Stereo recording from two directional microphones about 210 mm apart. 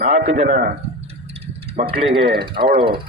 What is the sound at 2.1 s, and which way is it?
Speech, 25° right (ahead or behind).